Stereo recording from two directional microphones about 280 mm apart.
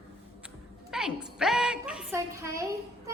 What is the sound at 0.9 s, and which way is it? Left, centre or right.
A woman's voice, centre.